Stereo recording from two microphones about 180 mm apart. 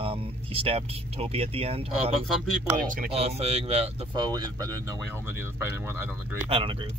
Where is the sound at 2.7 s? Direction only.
45° right (ahead or behind).